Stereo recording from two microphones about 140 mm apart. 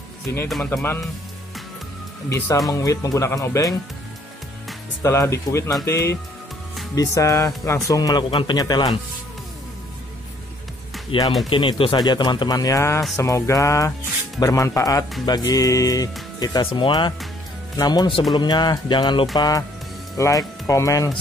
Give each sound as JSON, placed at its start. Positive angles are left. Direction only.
{"t": 2.2, "sound": "speech", "side_deg": 20}
{"t": 5.0, "sound": "speech", "side_deg": 20}
{"t": 11.1, "sound": "speech", "side_deg": 35}